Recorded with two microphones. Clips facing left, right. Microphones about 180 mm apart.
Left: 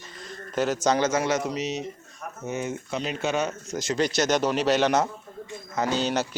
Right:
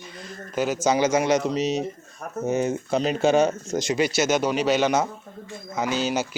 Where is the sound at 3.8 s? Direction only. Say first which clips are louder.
Right 2 dB; 10° right (ahead or behind).